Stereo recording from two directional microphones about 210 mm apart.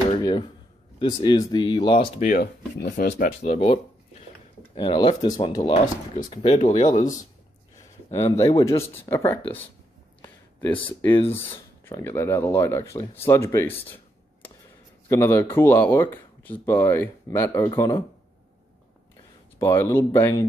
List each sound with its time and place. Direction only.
0.2 s a sound: 20° left (ahead or behind)
0.9 s speech: 20° left (ahead or behind)
2.1 s speech: 40° left (ahead or behind)
3.5 s speech: 30° left (ahead or behind)
8.1 s speech: 15° left (ahead or behind)
10.2 s a sound: 10° left (ahead or behind)
10.9 s speech: 25° left (ahead or behind)
11.3 s speech: 10° left (ahead or behind)
19.6 s speech: 10° left (ahead or behind)